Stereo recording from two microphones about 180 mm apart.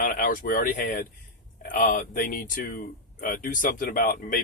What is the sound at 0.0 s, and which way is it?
Speech, 50° left (ahead or behind).